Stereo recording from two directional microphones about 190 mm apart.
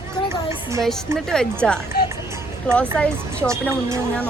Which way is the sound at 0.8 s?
Centre (ahead or behind).